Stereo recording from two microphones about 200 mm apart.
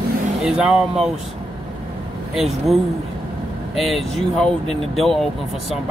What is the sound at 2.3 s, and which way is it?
Speech, centre (ahead or behind).